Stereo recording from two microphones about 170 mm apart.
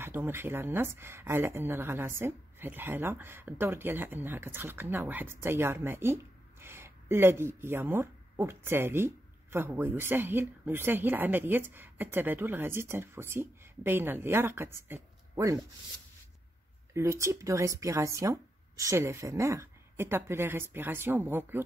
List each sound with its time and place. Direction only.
0.0 s speech: 15° right (ahead or behind)
16.9 s speech: 15° right (ahead or behind)